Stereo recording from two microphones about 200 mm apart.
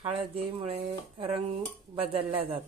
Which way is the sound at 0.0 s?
30° right (ahead or behind).